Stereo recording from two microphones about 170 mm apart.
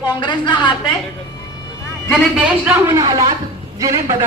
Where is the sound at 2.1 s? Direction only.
5° right (ahead or behind).